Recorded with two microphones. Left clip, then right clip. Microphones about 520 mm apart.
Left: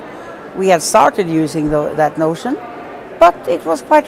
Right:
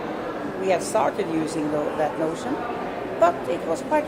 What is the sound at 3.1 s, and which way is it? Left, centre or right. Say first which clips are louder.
Speech: left 10 dB; left.